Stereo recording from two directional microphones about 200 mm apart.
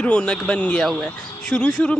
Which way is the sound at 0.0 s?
5° left (ahead or behind).